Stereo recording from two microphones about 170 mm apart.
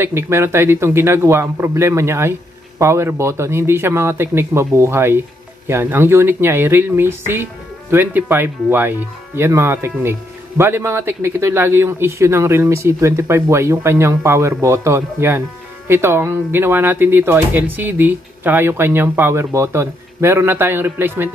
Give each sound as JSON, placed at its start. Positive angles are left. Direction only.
{"t": 0.0, "sound": "speech", "side_deg": -15}